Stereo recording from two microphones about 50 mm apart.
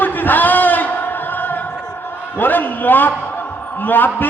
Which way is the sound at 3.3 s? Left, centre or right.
Left.